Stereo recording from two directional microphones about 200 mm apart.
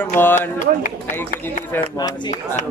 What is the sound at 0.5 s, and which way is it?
Speech, 40° left (ahead or behind).